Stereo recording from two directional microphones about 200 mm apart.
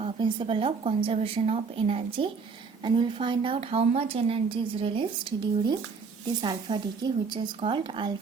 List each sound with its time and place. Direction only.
0.0 s a woman's voice: 25° right (ahead or behind)